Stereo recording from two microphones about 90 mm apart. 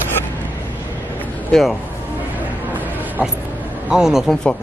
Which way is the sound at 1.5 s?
Centre (ahead or behind).